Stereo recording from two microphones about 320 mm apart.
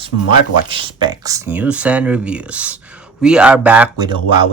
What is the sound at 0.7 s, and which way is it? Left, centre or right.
Speech, centre.